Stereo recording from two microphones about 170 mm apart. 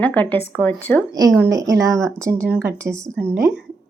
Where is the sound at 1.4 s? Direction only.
20° right (ahead or behind).